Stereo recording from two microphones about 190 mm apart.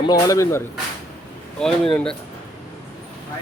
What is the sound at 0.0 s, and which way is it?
Speech, 20° left (ahead or behind).